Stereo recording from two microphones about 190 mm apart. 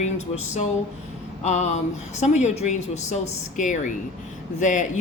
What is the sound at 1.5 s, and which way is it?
Speech, 35° left (ahead or behind).